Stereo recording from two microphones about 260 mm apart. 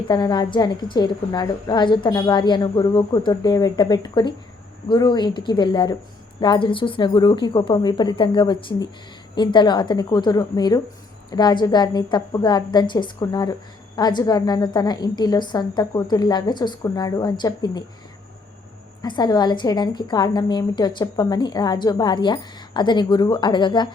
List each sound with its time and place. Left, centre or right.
0.1 s a woman's voice: centre
19.0 s a woman's voice: centre